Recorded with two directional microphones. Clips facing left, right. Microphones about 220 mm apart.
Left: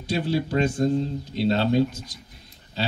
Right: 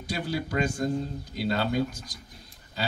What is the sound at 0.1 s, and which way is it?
A man's voice, 30° left (ahead or behind).